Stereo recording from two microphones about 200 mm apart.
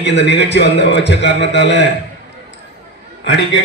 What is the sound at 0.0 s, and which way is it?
A man's voice, 60° left (ahead or behind).